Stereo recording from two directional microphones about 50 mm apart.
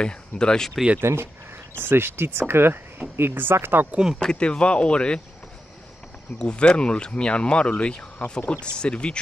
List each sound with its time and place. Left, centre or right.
0.0 s speech: centre
1.0 s speech: right
3.9 s speech: centre
4.2 s speech: centre
6.3 s speech: left
8.2 s speech: left
8.7 s speech: centre